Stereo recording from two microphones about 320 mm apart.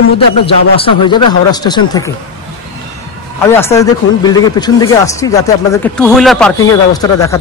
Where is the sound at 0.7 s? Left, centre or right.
Centre.